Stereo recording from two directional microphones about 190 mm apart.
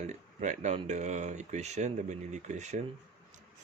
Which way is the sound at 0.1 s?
40° right (ahead or behind).